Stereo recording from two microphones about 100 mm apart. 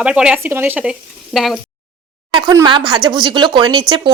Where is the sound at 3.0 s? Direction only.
45° right (ahead or behind).